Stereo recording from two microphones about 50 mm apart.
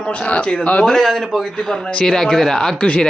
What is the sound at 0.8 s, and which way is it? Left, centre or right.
Speech, centre.